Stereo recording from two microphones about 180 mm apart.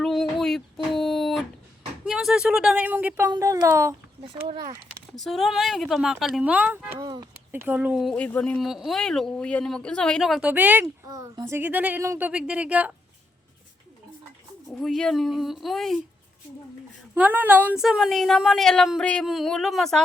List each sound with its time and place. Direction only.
0.0 s child singing: centre (ahead or behind)
2.0 s speech: 5° right (ahead or behind)
4.2 s speech: 30° right (ahead or behind)
5.1 s speech: centre (ahead or behind)
7.0 s speech: 20° right (ahead or behind)
7.5 s speech: 10° right (ahead or behind)
14.8 s speech: centre (ahead or behind)
17.2 s speech: 10° right (ahead or behind)